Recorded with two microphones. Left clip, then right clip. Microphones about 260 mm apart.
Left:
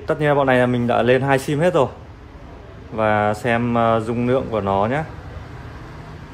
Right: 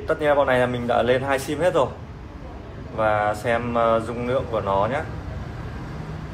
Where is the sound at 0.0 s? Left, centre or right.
Left.